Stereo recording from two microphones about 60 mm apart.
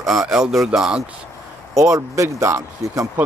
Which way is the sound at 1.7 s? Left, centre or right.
Right.